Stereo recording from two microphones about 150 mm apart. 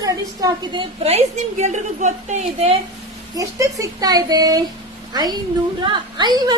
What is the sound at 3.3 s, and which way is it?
A woman's voice, 25° right (ahead or behind).